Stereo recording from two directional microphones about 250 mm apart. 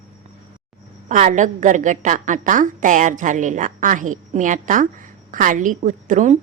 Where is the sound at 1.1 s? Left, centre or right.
Right.